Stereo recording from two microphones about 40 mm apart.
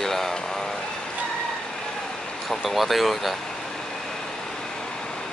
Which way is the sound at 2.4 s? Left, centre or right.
Centre.